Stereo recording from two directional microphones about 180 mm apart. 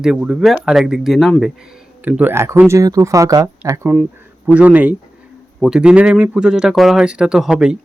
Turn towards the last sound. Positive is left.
turn(degrees=-5)  # may be behind; listen again after turning